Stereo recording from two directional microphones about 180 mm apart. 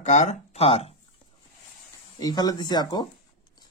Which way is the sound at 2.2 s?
20° left (ahead or behind).